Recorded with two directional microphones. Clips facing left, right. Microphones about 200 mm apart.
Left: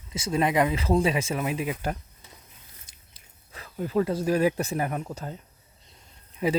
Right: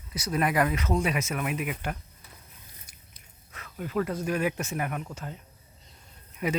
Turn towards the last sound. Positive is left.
turn(degrees=25)  # may be behind; listen again after turning